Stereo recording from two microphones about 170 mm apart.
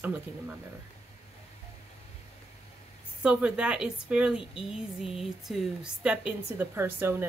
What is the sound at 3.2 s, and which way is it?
A woman's voice, 5° right (ahead or behind).